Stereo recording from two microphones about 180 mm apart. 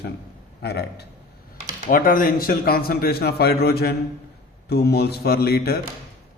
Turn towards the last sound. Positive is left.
turn(degrees=60)  # may be behind; listen again after turning